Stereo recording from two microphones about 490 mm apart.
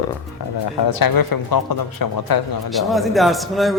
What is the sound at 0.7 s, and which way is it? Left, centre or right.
Speech, left.